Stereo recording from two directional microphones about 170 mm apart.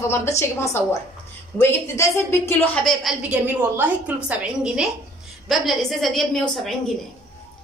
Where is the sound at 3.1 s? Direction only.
5° right (ahead or behind).